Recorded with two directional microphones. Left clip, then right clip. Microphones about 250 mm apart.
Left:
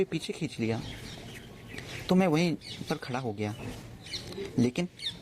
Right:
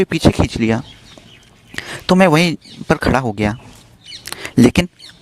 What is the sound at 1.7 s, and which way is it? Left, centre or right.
Speech, right.